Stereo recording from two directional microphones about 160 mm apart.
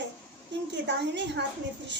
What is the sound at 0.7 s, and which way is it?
Speech, 90° right.